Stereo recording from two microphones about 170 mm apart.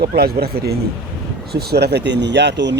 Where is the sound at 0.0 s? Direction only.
65° right (ahead or behind).